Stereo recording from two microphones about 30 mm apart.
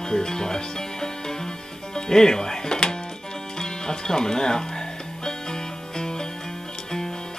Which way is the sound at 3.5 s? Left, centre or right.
Left.